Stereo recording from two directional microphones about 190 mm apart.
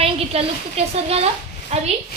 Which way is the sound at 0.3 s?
30° right (ahead or behind).